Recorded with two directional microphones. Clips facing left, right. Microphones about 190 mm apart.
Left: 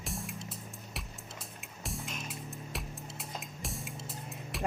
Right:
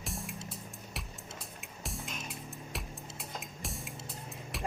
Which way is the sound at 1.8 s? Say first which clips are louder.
Left 1 dB; centre (ahead or behind).